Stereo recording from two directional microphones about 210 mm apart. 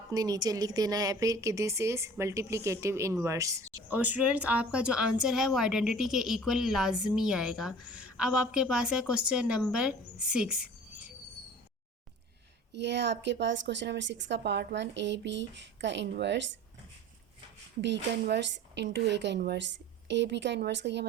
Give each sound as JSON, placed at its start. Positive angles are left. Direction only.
{"t": 0.1, "sound": "a woman's voice", "side_deg": -15}
{"t": 12.7, "sound": "speech", "side_deg": -55}
{"t": 17.7, "sound": "speech", "side_deg": -55}